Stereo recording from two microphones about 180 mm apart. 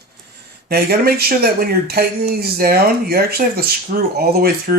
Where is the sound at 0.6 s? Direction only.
60° right (ahead or behind).